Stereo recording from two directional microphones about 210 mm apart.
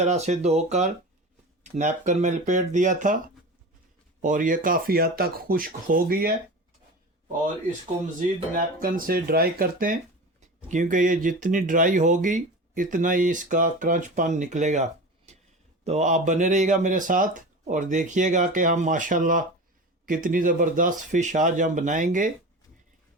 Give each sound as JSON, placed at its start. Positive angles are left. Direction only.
{"t": 0.0, "sound": "speech", "side_deg": -35}
{"t": 4.2, "sound": "speech", "side_deg": -40}
{"t": 8.2, "sound": "speech", "side_deg": -40}
{"t": 15.3, "sound": "a sound", "side_deg": -30}
{"t": 15.8, "sound": "speech", "side_deg": -30}